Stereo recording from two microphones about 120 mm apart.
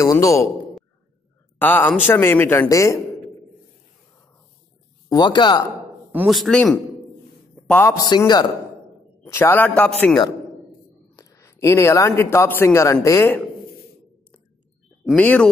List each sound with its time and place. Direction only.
0.0 s speech: 25° left (ahead or behind)
1.6 s a man's voice: 15° left (ahead or behind)
5.1 s a man's voice: 35° left (ahead or behind)
6.2 s a man's voice: centre (ahead or behind)
7.9 s a man's voice: 30° left (ahead or behind)
9.3 s a man's voice: 20° left (ahead or behind)
11.1 s a man's voice: 25° left (ahead or behind)
15.1 s a man's voice: 10° left (ahead or behind)